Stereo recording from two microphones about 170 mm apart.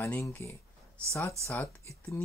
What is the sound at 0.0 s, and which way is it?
Speech, 15° left (ahead or behind).